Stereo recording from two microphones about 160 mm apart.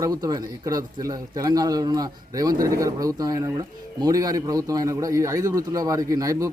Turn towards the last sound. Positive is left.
turn(degrees=-20)  # may be behind; listen again after turning